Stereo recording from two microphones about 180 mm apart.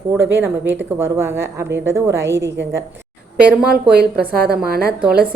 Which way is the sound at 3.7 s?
60° right (ahead or behind).